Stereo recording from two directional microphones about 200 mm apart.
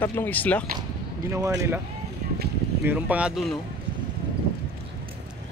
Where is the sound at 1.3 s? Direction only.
15° right (ahead or behind).